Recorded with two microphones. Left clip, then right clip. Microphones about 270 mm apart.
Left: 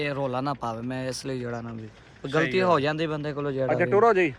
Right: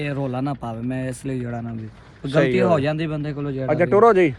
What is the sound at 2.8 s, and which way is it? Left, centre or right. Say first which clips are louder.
Speech: right 2 dB; centre.